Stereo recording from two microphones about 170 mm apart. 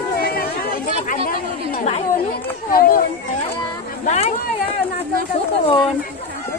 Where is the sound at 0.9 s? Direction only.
55° left (ahead or behind).